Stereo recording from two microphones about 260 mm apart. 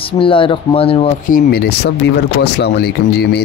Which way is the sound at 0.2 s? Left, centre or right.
Centre.